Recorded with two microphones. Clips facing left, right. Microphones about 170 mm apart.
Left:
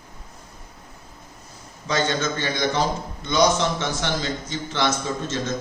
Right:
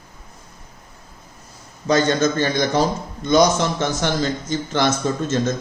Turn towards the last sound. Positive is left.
turn(degrees=-45)  # may be behind; listen again after turning